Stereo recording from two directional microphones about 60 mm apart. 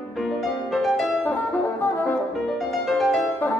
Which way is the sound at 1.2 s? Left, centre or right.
Left.